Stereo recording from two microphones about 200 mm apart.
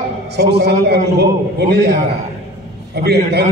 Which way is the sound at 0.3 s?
55° right (ahead or behind).